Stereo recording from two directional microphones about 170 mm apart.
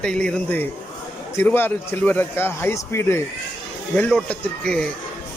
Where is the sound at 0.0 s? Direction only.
5° left (ahead or behind).